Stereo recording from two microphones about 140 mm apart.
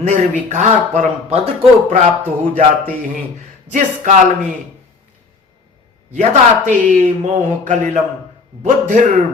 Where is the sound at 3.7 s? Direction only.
65° right (ahead or behind).